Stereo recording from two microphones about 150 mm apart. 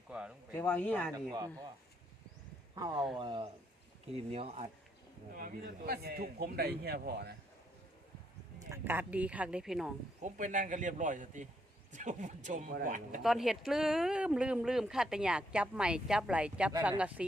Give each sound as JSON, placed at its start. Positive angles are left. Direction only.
{"t": 0.1, "sound": "a sound", "side_deg": -5}
{"t": 0.5, "sound": "speech", "side_deg": 10}
{"t": 1.1, "sound": "speech", "side_deg": -25}
{"t": 2.7, "sound": "speech", "side_deg": -25}
{"t": 4.1, "sound": "speech", "side_deg": -40}
{"t": 5.3, "sound": "a man's voice", "side_deg": -70}
{"t": 8.5, "sound": "speech", "side_deg": -15}
{"t": 10.2, "sound": "speech", "side_deg": -60}
{"t": 13.2, "sound": "speech", "side_deg": 0}